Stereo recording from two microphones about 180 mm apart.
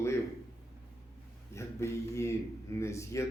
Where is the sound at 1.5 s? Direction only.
15° left (ahead or behind).